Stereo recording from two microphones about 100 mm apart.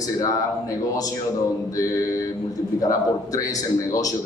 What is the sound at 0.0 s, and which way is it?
Speech, 35° left (ahead or behind).